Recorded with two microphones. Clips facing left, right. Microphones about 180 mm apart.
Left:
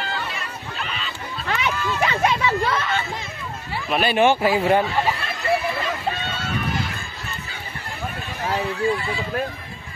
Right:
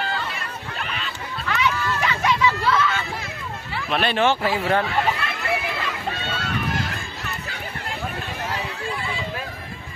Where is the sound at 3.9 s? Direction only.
10° left (ahead or behind).